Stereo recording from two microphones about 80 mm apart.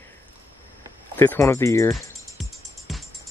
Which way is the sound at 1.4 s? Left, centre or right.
Left.